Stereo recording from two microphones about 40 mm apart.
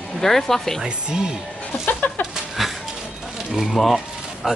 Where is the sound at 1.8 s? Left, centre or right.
Left.